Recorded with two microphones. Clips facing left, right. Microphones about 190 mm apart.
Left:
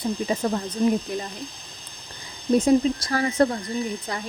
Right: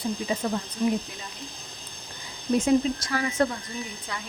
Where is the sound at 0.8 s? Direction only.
40° left (ahead or behind).